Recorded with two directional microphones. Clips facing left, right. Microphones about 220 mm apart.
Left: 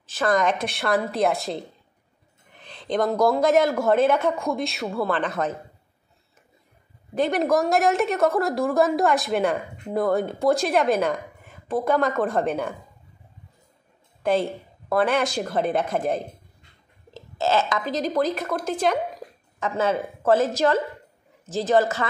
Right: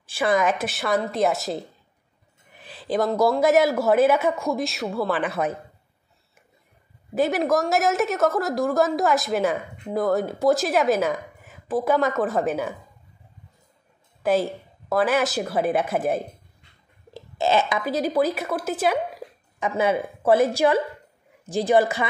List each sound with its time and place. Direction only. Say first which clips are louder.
0.0 s a woman's voice: even; 10° right (ahead or behind)
7.2 s a woman's voice: even; 5° right (ahead or behind)
14.2 s a woman's voice: right 1 dB; 5° right (ahead or behind)